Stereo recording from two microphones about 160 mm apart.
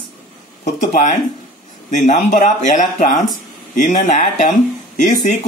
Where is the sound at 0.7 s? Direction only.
50° left (ahead or behind).